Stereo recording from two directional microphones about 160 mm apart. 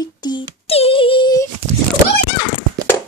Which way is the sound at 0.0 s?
25° left (ahead or behind).